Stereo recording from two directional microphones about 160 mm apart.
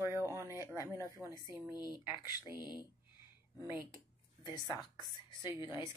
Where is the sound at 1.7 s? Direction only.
25° left (ahead or behind).